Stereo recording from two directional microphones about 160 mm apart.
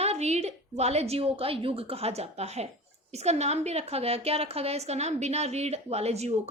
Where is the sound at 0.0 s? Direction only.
40° right (ahead or behind).